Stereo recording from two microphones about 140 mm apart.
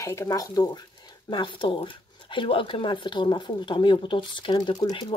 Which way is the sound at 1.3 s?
35° left (ahead or behind).